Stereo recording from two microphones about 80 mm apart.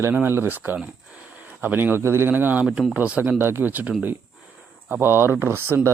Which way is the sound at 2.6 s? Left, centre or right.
Centre.